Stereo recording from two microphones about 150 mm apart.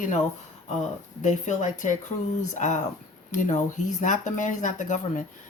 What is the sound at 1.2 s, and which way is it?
Speech, 55° left (ahead or behind).